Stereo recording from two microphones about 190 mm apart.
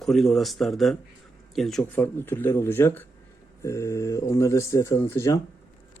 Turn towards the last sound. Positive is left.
turn(degrees=15)  # may be behind; listen again after turning